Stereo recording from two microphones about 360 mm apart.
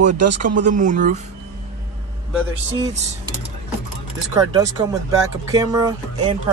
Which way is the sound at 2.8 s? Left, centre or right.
Centre.